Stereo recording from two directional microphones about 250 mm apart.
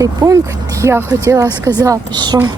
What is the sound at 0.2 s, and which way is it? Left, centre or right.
Speech, centre.